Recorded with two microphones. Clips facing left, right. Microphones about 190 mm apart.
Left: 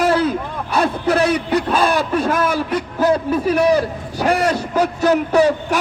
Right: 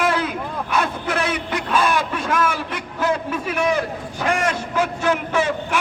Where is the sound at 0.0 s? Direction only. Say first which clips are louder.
Left 5 dB; 35° left (ahead or behind).